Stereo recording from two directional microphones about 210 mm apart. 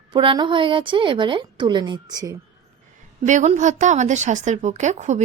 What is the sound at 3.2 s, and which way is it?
A woman's voice, 35° right (ahead or behind).